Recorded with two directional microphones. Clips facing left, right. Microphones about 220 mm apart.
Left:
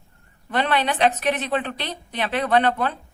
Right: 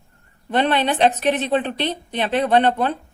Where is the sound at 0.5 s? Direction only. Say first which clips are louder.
Right 4 dB; 25° right (ahead or behind).